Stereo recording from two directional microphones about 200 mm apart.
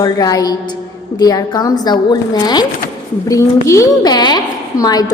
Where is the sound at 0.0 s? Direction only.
20° left (ahead or behind).